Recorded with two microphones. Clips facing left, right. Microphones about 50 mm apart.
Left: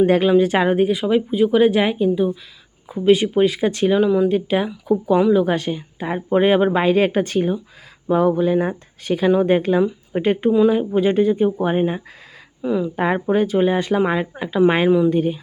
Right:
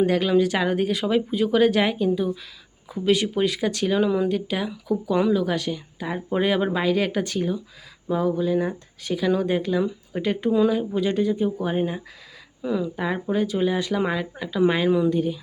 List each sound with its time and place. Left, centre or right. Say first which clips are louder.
0.0 s speech: left 5 dB; left
0.9 s speech: left 4 dB; centre
3.9 s speech: left 5 dB; centre
4.3 s speech: left 6 dB; left
12.6 s speech: left 4 dB; centre
13.0 s speech: left 6 dB; left
14.8 s speech: left 5 dB; centre
15.1 s speech: left 4 dB; left